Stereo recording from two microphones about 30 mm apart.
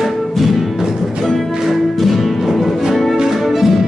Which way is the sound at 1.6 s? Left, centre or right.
Centre.